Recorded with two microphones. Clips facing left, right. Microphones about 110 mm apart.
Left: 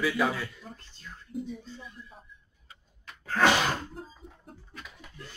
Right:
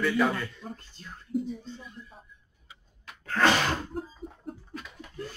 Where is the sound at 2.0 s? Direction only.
25° right (ahead or behind).